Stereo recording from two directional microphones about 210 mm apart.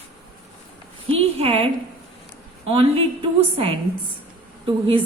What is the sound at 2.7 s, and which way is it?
A woman's voice, 25° right (ahead or behind).